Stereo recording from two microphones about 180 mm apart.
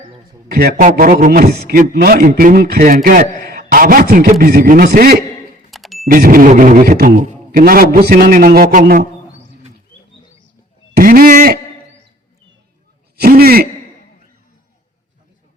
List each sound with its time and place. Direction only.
0.5 s a man's voice: 60° right (ahead or behind)
3.3 s a man's voice: 65° right (ahead or behind)
3.6 s a man's voice: 50° right (ahead or behind)
5.7 s a sound: centre (ahead or behind)
6.1 s a man's voice: 50° right (ahead or behind)
10.9 s a man's voice: 55° right (ahead or behind)
13.1 s a sound: 60° right (ahead or behind)